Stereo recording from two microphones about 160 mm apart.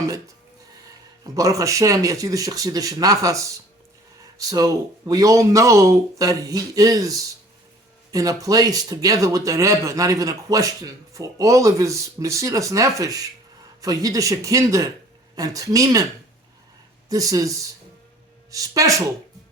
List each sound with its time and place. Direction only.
1.2 s speech: 20° right (ahead or behind)
17.1 s speech: 20° right (ahead or behind)